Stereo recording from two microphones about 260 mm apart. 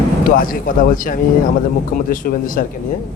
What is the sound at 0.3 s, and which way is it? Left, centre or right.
Speech, left.